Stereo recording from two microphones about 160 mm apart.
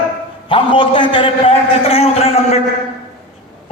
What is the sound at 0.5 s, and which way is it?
A man's voice, 30° left (ahead or behind).